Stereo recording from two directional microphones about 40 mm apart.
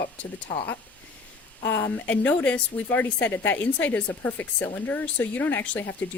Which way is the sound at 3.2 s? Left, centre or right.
Left.